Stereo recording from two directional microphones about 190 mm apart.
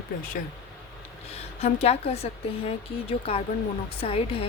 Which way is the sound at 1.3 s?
35° left (ahead or behind).